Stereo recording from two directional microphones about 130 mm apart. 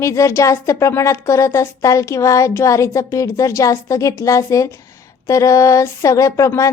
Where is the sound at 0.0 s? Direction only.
20° left (ahead or behind).